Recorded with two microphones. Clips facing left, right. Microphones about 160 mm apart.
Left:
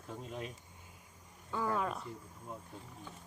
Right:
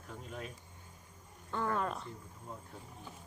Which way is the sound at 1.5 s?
5° left (ahead or behind).